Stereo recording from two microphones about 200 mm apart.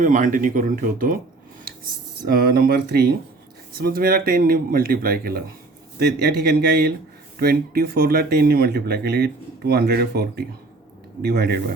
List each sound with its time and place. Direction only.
0.0 s speech: 40° right (ahead or behind)
2.2 s speech: 50° right (ahead or behind)